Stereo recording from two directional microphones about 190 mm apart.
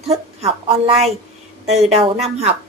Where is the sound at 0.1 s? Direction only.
30° right (ahead or behind).